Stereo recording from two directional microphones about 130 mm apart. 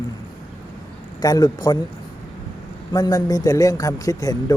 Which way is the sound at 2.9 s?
30° left (ahead or behind).